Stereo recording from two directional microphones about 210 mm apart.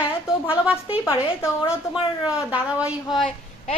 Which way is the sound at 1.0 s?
15° left (ahead or behind).